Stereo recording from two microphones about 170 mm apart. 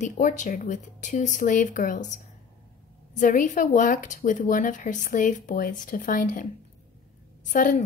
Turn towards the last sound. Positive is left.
turn(degrees=50)  # may be behind; listen again after turning